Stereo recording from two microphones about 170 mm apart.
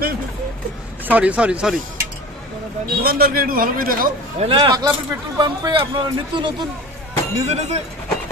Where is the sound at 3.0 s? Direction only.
65° right (ahead or behind).